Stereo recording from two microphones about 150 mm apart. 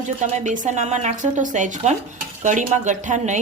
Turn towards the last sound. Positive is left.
turn(degrees=-55)  # may be behind; listen again after turning